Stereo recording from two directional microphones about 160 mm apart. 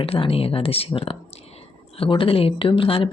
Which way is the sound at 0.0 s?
35° left (ahead or behind).